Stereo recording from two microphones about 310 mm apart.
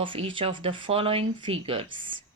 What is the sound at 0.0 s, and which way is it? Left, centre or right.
Speech, centre.